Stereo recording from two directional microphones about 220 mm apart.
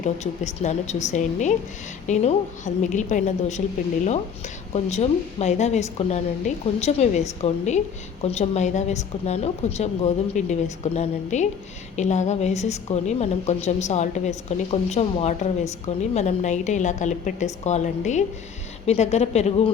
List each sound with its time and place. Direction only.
0.0 s a woman's voice: 30° left (ahead or behind)